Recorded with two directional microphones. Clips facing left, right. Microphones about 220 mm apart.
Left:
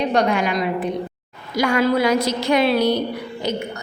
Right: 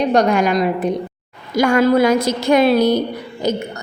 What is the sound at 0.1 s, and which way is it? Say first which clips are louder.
A woman's voice: right 4 dB; 45° right (ahead or behind).